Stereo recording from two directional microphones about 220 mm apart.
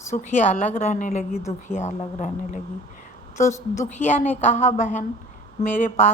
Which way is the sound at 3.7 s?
30° left (ahead or behind).